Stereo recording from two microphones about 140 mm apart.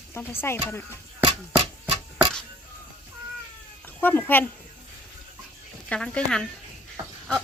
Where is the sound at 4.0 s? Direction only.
15° left (ahead or behind).